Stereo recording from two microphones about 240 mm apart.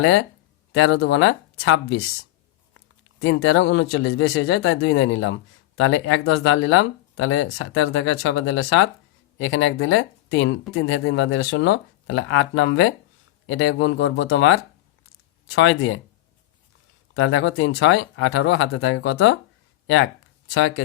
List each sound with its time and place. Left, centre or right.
0.0 s speech: left
3.2 s speech: left
17.2 s speech: left
20.5 s speech: left